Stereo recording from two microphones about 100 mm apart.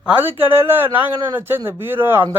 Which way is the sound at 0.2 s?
20° right (ahead or behind).